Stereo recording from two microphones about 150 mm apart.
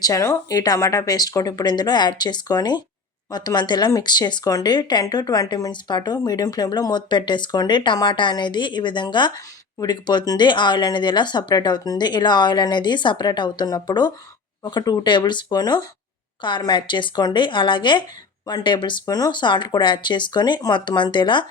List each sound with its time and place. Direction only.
0.0 s speech: 20° left (ahead or behind)